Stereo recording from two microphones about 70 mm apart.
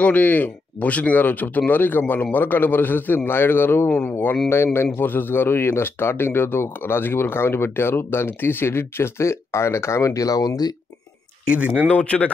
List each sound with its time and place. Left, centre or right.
0.0 s speech: left
4.9 s speech: left
11.5 s speech: centre
11.9 s speech: centre